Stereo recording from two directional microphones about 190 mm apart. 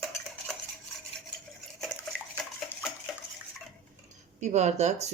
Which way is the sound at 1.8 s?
5° right (ahead or behind).